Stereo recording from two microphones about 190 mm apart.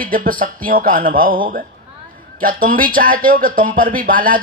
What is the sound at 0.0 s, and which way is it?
Speech, 45° right (ahead or behind).